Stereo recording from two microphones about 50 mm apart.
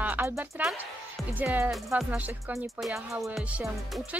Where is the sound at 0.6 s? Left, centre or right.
Right.